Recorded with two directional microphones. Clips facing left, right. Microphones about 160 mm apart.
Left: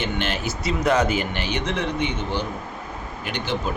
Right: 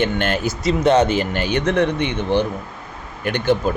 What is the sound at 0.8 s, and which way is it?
Speech, 30° right (ahead or behind).